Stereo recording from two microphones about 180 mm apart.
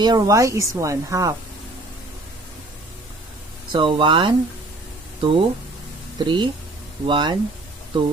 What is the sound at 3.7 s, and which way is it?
Speech, 25° right (ahead or behind).